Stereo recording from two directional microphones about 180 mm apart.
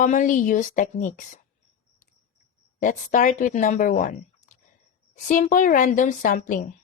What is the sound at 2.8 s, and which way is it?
A woman's voice, 45° left (ahead or behind).